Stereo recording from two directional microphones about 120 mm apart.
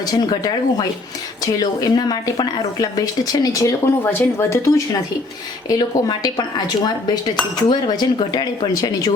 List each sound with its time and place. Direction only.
0.1 s dishes: 35° left (ahead or behind)
1.5 s speech: 35° left (ahead or behind)
5.6 s dishes: 35° left (ahead or behind)